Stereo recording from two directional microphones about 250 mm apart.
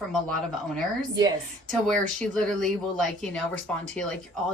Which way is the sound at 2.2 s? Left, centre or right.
Centre.